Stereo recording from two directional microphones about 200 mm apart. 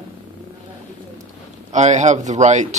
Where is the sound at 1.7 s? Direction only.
35° right (ahead or behind).